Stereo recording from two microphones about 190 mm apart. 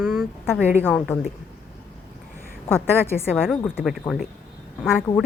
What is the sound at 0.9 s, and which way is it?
Speech, centre (ahead or behind).